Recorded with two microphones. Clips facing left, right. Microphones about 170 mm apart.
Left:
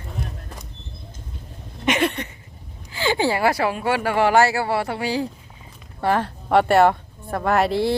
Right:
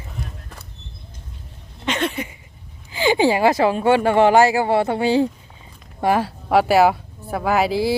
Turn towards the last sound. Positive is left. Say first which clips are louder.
# right 1 dB
turn(degrees=0)  # may be behind; listen again after turning